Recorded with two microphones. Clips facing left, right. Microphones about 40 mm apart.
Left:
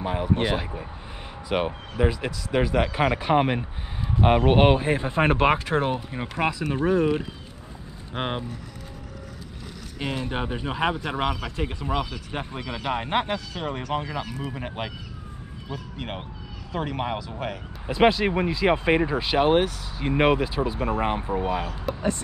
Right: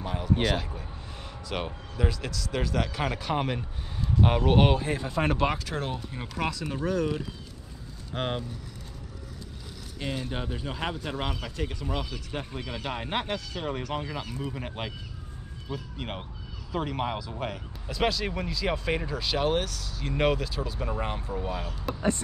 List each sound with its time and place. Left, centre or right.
0.0 s speech: left
9.9 s speech: centre; by 12.8 s left
12.8 s speech: left
17.8 s speech: left